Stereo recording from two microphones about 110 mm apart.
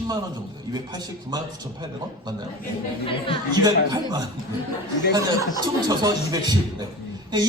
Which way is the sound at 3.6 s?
40° right (ahead or behind).